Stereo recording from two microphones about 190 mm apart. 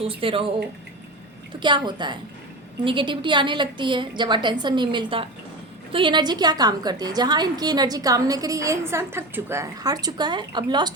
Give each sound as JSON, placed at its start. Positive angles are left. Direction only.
{"t": 0.0, "sound": "a woman's voice", "side_deg": -30}
{"t": 1.5, "sound": "a woman's voice", "side_deg": -25}